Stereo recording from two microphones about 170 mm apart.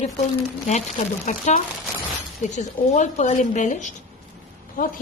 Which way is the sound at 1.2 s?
45° left (ahead or behind).